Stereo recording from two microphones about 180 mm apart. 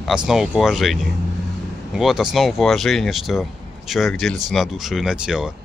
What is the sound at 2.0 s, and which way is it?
Speech, centre (ahead or behind).